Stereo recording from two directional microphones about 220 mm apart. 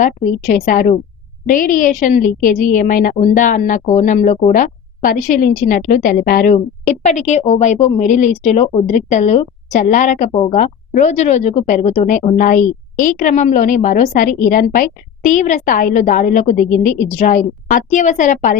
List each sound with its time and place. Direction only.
0.0 s a woman's voice: 35° left (ahead or behind)